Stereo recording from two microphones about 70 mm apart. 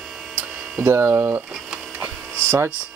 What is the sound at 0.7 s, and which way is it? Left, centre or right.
Speech, right.